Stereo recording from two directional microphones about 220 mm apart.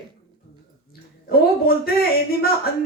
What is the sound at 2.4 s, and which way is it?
Speech, 45° left (ahead or behind).